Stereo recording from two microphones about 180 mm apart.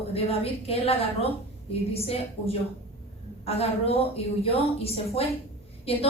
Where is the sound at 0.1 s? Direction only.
35° left (ahead or behind).